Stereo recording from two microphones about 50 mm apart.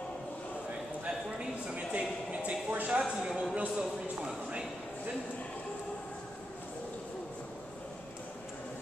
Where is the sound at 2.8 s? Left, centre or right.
Right.